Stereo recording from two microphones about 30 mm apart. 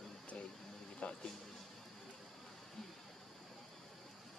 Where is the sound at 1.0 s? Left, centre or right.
Left.